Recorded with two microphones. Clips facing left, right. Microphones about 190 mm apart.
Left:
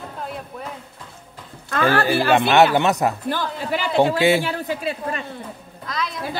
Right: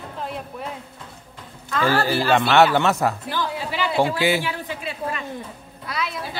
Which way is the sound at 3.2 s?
50° left (ahead or behind).